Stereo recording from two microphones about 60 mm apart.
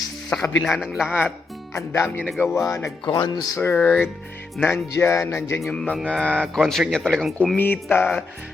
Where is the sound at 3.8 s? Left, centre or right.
Left.